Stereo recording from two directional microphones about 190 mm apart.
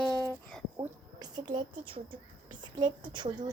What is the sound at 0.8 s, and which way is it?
A woman's voice, 20° right (ahead or behind).